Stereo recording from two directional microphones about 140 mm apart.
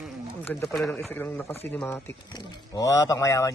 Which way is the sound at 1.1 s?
15° left (ahead or behind).